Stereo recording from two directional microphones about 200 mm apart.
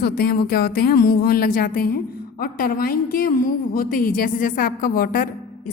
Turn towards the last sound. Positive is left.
turn(degrees=45)  # may be behind; listen again after turning